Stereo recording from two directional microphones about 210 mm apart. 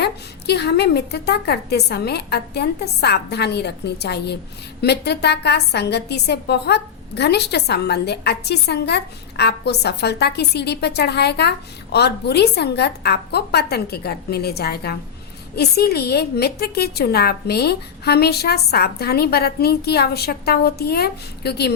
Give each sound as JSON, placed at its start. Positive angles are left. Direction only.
{"t": 0.0, "sound": "a woman's voice", "side_deg": 50}